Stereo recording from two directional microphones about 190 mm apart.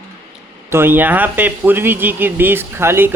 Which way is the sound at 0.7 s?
10° right (ahead or behind).